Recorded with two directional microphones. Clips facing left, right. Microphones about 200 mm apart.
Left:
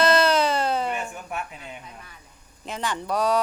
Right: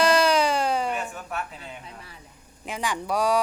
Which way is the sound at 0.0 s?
10° right (ahead or behind).